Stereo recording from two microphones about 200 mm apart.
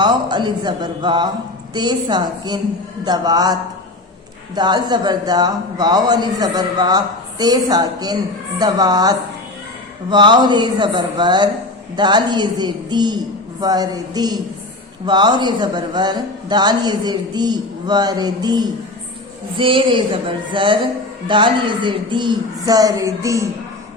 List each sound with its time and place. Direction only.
0.0 s a man's voice: 20° right (ahead or behind)